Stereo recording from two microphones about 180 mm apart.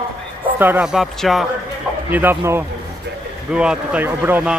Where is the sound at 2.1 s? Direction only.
10° right (ahead or behind).